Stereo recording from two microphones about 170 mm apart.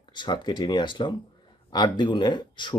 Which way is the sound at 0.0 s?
25° left (ahead or behind).